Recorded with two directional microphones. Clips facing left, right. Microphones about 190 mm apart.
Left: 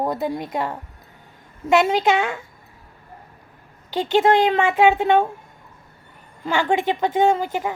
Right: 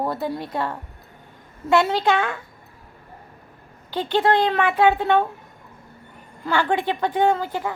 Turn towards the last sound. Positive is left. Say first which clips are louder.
# left 2 dB
turn(degrees=15)  # may be behind; listen again after turning